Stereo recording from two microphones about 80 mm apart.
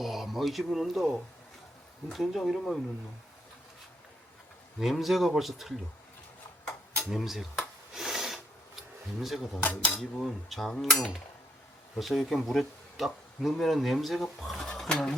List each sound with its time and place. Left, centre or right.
0.0 s speech: centre
4.8 s speech: centre
7.1 s speech: centre
7.9 s a sound: centre
9.2 s speech: centre
9.6 s speech: centre
10.0 s speech: centre
14.7 s speech: centre